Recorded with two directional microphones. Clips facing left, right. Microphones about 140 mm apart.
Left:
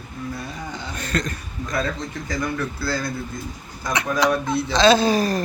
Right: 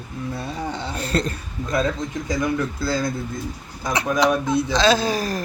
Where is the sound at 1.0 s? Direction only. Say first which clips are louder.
Right 2 dB; 30° right (ahead or behind).